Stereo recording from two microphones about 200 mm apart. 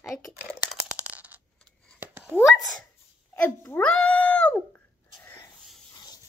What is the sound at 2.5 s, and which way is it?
Speech, centre (ahead or behind).